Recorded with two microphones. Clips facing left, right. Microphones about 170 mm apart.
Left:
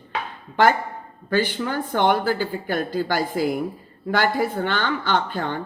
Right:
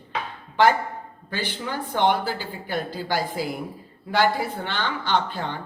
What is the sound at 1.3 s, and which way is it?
A man's voice, 50° left (ahead or behind).